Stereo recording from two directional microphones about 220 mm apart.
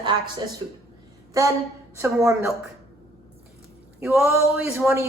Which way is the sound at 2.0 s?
10° right (ahead or behind).